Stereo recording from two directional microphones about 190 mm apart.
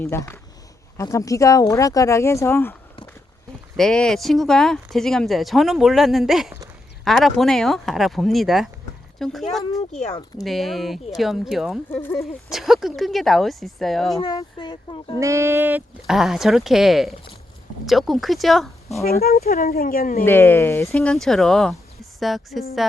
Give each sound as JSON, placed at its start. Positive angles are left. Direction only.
{"t": 0.0, "sound": "speech", "side_deg": 10}
{"t": 3.8, "sound": "speech", "side_deg": 5}
{"t": 9.9, "sound": "speech", "side_deg": 35}
{"t": 10.4, "sound": "speech", "side_deg": 0}
{"t": 11.9, "sound": "speech", "side_deg": 10}
{"t": 12.1, "sound": "speech", "side_deg": 0}
{"t": 14.2, "sound": "speech", "side_deg": 20}
{"t": 15.2, "sound": "speech", "side_deg": -15}
{"t": 19.2, "sound": "speech", "side_deg": 50}
{"t": 20.2, "sound": "speech", "side_deg": 10}
{"t": 20.9, "sound": "speech", "side_deg": 5}